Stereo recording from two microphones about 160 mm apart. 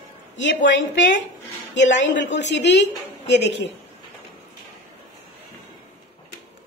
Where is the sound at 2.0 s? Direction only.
90° left.